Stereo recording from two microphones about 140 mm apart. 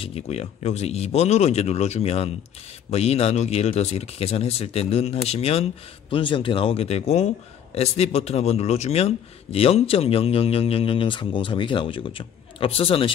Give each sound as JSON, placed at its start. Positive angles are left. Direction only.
{"t": 0.0, "sound": "a man's voice", "side_deg": 45}